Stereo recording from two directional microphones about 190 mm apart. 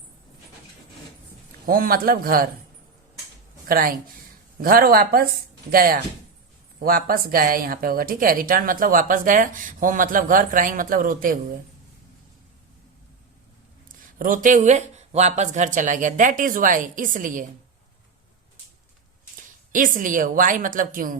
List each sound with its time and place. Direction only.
1.6 s speech: 50° right (ahead or behind)
3.7 s speech: 50° right (ahead or behind)
13.8 s speech: 45° right (ahead or behind)
19.4 s a woman's voice: 45° right (ahead or behind)